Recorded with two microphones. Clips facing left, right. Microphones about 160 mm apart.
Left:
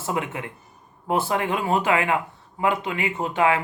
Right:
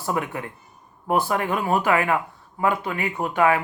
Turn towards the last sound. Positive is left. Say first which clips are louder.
# right 1 dB
turn(degrees=25)  # may be behind; listen again after turning